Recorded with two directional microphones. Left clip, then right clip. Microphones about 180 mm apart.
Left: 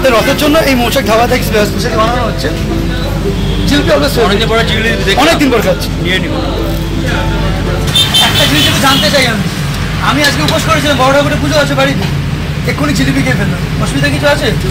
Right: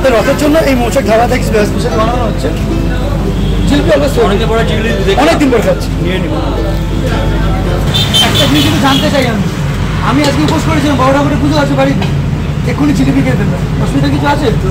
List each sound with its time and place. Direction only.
0.0 s speech: 5° left (ahead or behind)
5.2 s speech: 5° left (ahead or behind)